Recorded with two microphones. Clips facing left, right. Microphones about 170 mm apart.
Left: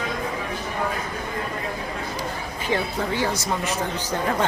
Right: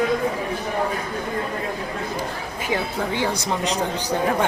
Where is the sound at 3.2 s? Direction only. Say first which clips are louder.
Right 2 dB; 15° right (ahead or behind).